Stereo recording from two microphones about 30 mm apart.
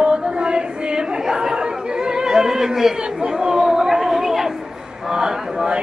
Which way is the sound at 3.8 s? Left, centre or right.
Centre.